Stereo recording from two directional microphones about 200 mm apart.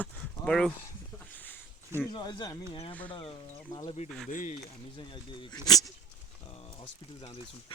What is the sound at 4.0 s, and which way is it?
Speech, 35° left (ahead or behind).